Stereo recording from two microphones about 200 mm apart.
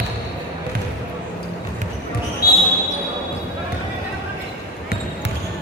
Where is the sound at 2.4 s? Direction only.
50° left (ahead or behind).